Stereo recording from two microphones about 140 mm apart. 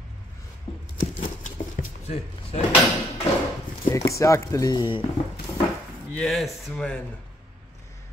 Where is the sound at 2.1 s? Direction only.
45° left (ahead or behind).